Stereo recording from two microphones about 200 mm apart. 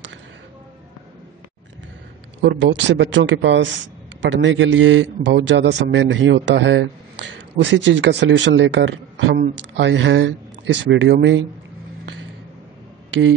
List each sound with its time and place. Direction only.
2.4 s a man's voice: 65° right (ahead or behind)